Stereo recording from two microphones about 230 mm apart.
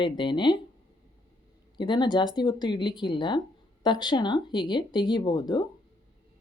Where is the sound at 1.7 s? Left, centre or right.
Centre.